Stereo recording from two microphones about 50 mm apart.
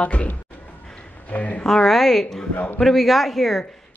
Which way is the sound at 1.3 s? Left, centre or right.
Left.